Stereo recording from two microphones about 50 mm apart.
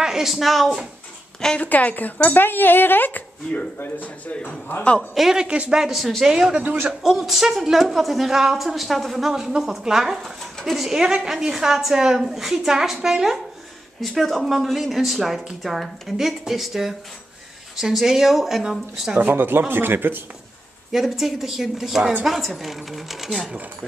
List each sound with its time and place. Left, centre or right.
0.0 s speech: centre
1.6 s speech: left
2.3 s speech: left
5.1 s speech: centre
5.4 s speech: centre
5.8 s a woman's voice: centre
6.6 s speech: right
6.9 s a woman's voice: centre
19.1 s speech: right
20.9 s speech: centre